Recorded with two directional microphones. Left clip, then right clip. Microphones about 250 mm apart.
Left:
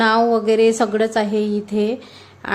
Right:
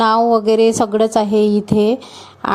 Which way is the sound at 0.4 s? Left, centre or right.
Right.